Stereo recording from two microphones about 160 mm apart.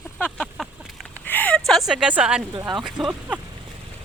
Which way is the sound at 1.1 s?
10° left (ahead or behind).